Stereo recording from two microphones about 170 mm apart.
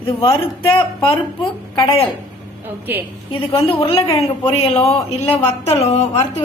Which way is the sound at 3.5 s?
35° left (ahead or behind).